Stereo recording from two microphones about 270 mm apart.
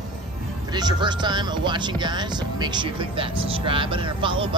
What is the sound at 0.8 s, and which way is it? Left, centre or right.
Speech, centre.